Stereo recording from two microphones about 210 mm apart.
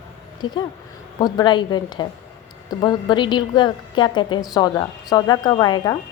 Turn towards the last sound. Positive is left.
turn(degrees=20)  # may be behind; listen again after turning